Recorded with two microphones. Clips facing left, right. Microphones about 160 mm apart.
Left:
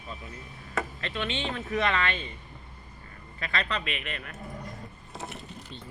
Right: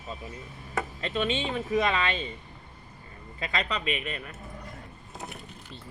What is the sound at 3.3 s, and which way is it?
Speech, 20° right (ahead or behind).